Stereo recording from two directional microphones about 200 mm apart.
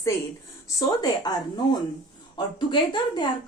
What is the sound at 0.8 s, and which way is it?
Speech, 20° left (ahead or behind).